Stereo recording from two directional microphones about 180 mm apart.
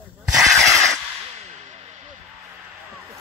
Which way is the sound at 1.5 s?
40° right (ahead or behind).